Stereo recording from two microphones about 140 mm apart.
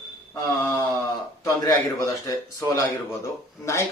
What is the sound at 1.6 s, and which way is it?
A man's voice, 25° left (ahead or behind).